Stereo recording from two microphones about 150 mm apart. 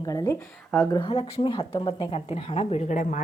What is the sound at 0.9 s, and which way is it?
Speech, 40° left (ahead or behind).